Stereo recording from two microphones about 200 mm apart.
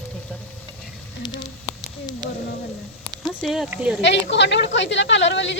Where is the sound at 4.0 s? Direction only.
60° left (ahead or behind).